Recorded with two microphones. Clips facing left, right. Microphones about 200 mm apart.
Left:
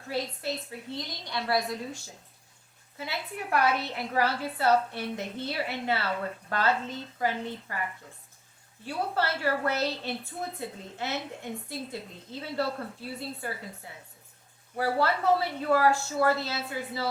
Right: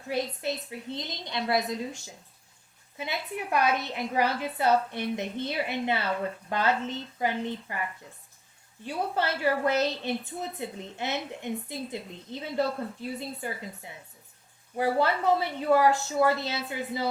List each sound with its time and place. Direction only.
0.4 s a woman's voice: 20° right (ahead or behind)
3.0 s a woman's voice: 20° right (ahead or behind)
8.8 s a woman's voice: 20° right (ahead or behind)